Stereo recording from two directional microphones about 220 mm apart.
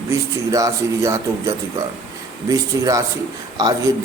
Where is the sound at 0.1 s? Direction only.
15° right (ahead or behind).